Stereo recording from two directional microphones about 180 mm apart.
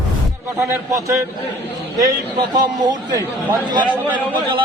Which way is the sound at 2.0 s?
20° right (ahead or behind).